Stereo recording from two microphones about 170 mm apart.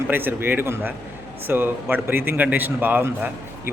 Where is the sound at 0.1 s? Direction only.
10° right (ahead or behind).